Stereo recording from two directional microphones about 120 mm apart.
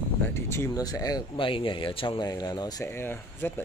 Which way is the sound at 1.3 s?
45° left (ahead or behind).